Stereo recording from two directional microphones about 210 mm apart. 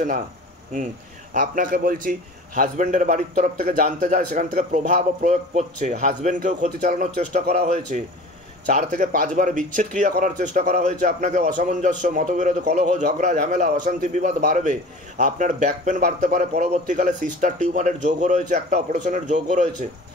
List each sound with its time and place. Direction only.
1.3 s a man's voice: 40° right (ahead or behind)